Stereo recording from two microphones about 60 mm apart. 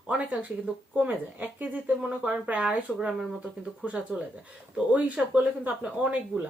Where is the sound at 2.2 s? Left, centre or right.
Centre.